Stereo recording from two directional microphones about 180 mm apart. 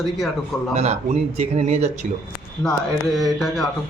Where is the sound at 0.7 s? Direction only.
35° right (ahead or behind).